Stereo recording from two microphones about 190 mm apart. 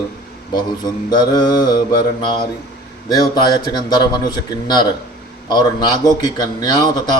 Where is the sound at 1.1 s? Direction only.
25° left (ahead or behind).